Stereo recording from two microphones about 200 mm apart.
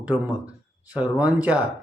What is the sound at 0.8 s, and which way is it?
Speech, 5° right (ahead or behind).